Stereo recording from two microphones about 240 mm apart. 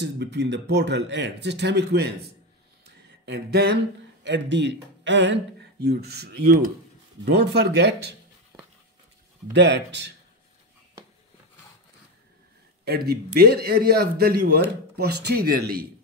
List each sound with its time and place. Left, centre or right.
0.0 s speech: right
3.3 s speech: right
9.5 s speech: right
12.8 s a man's voice: right